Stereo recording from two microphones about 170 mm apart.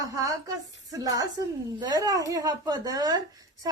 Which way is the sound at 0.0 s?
20° right (ahead or behind).